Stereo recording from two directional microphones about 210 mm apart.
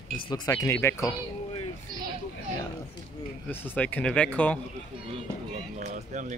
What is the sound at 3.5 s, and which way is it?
Speech, 10° left (ahead or behind).